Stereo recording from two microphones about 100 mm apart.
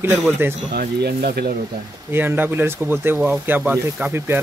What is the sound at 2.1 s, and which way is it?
Speech, 20° right (ahead or behind).